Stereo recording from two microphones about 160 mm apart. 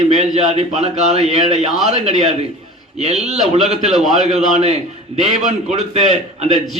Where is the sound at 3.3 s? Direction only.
45° right (ahead or behind).